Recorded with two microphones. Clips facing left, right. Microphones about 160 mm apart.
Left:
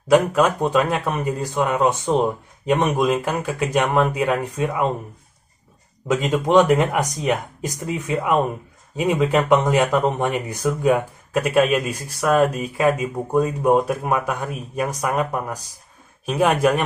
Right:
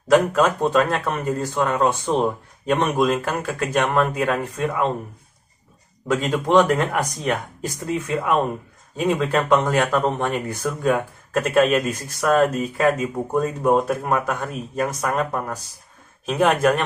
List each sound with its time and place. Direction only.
0.1 s speech: 10° left (ahead or behind)
6.0 s speech: 15° left (ahead or behind)